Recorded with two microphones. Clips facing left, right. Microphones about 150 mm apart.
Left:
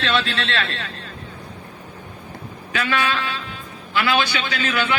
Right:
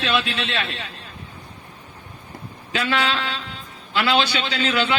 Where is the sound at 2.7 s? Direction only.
25° right (ahead or behind).